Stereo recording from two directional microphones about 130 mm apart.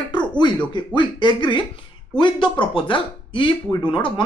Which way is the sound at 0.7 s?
35° left (ahead or behind).